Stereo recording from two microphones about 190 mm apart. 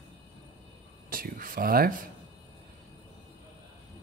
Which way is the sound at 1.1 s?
50° right (ahead or behind).